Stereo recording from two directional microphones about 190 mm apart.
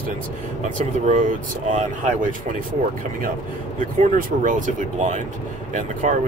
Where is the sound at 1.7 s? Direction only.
40° right (ahead or behind).